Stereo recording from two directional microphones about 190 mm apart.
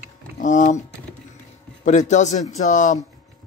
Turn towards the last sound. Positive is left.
turn(degrees=40)  # may be behind; listen again after turning